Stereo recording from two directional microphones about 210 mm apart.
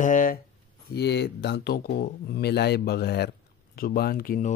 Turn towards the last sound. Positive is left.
turn(degrees=40)  # may be behind; listen again after turning